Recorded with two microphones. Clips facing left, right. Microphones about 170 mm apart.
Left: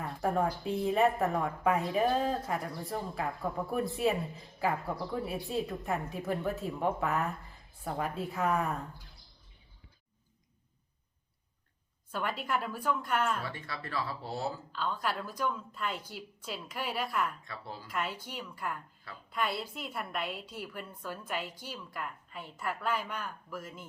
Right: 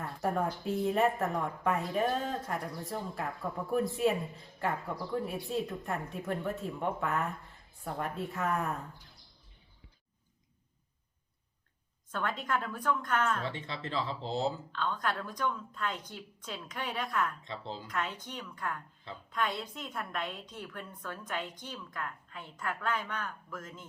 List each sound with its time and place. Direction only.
0.0 s speech: centre (ahead or behind)
12.1 s a woman's voice: 10° left (ahead or behind)
13.4 s speech: 20° right (ahead or behind)
14.7 s a woman's voice: 5° left (ahead or behind)
17.4 s speech: 20° right (ahead or behind)
17.8 s a woman's voice: 10° left (ahead or behind)